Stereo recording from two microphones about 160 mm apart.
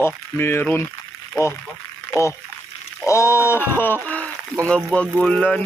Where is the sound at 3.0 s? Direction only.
20° left (ahead or behind).